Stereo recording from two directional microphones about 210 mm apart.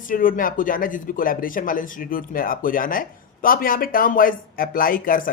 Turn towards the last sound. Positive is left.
turn(degrees=45)  # may be behind; listen again after turning